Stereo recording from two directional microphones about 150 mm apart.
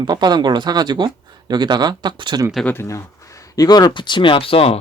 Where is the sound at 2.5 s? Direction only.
10° left (ahead or behind); by 4.7 s 40° left (ahead or behind).